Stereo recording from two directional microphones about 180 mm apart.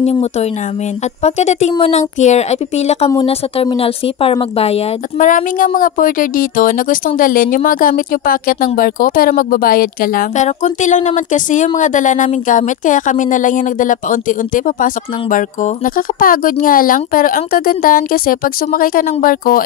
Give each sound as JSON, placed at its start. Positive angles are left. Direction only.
{"t": 0.0, "sound": "speech", "side_deg": 35}
{"t": 5.3, "sound": "a woman's voice", "side_deg": 50}